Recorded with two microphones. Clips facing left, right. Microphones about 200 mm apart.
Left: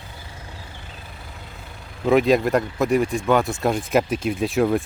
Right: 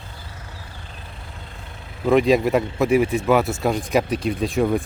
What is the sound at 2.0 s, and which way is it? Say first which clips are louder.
Speech: right 1 dB; centre (ahead or behind).